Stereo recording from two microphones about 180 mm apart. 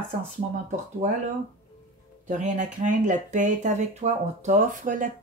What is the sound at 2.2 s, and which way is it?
Speech, 45° right (ahead or behind).